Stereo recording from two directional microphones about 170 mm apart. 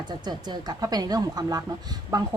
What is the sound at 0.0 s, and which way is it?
Speech, 25° right (ahead or behind).